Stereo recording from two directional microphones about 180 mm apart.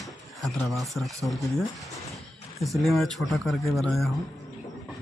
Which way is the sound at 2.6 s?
Centre (ahead or behind).